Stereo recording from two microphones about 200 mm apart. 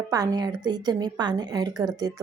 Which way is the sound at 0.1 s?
20° right (ahead or behind).